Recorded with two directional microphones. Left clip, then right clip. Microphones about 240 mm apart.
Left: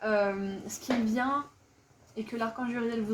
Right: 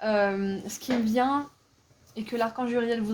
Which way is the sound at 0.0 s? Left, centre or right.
Right.